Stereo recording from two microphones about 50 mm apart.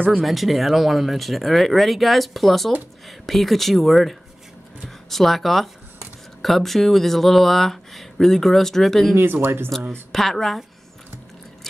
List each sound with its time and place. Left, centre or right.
0.2 s speech: centre
9.1 s speech: right
9.7 s a woman's voice: centre